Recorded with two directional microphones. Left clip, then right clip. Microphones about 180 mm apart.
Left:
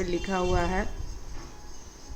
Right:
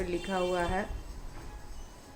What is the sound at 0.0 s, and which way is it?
Speech, 20° left (ahead or behind).